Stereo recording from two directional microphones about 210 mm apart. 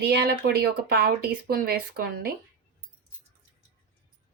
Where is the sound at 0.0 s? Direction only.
50° right (ahead or behind).